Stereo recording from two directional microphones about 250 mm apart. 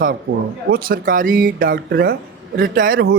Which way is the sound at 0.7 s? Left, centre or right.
Right.